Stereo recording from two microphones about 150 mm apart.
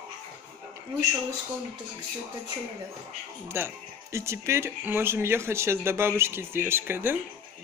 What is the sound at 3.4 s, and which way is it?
Speech, 15° right (ahead or behind).